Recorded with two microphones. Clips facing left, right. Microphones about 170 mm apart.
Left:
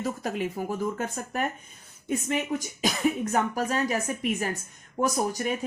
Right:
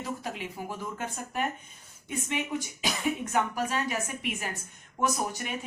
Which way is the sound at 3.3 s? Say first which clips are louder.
Left 3 dB; 40° left (ahead or behind).